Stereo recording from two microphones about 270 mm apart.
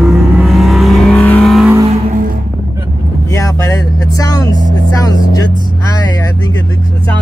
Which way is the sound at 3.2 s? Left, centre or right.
Centre.